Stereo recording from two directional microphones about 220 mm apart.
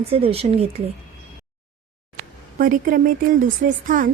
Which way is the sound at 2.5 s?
40° right (ahead or behind).